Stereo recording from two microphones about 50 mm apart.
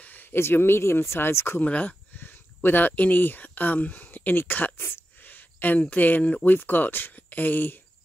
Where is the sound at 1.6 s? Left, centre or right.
Left.